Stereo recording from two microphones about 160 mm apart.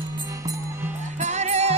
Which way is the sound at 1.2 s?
45° right (ahead or behind).